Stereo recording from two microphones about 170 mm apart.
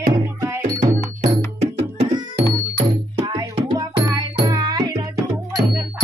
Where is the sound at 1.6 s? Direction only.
80° right.